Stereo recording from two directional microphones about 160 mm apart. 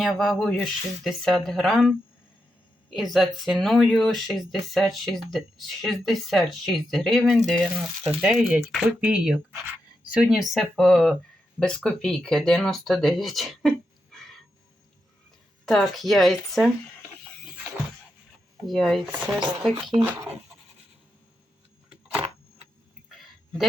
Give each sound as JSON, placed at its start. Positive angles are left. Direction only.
{"t": 0.0, "sound": "speech", "side_deg": 0}
{"t": 15.6, "sound": "speech", "side_deg": 0}
{"t": 18.6, "sound": "speech", "side_deg": 0}
{"t": 20.1, "sound": "speech", "side_deg": -20}